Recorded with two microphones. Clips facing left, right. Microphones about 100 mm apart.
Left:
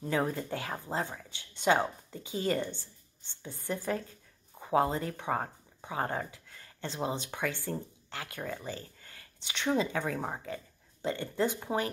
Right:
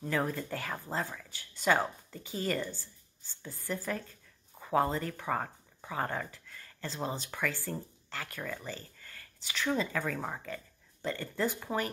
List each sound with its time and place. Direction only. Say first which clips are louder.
0.0 s speech: left 2 dB; 20° left (ahead or behind)
8.6 s a sound: left 2 dB; 15° left (ahead or behind)
9.7 s speech: left 3 dB; 15° left (ahead or behind)